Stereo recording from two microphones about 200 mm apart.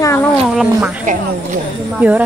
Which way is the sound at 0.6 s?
Centre (ahead or behind).